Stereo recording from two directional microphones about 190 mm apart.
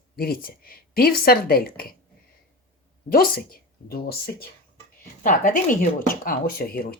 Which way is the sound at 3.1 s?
55° left (ahead or behind).